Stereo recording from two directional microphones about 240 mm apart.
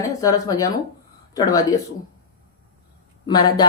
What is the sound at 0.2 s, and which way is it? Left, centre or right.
Speech, centre.